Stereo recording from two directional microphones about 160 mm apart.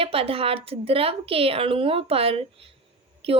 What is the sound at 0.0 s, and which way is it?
A woman's voice, 35° right (ahead or behind).